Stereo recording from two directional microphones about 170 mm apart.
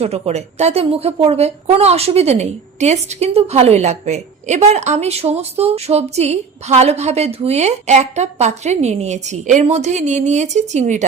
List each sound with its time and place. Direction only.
0.0 s a woman's voice: 40° right (ahead or behind)